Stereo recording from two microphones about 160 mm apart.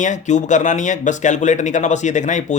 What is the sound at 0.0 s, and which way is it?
Speech, 50° left (ahead or behind).